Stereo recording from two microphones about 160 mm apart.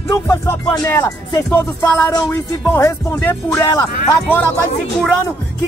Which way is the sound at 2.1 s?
25° left (ahead or behind).